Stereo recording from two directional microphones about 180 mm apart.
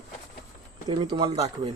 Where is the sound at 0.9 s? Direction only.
25° right (ahead or behind).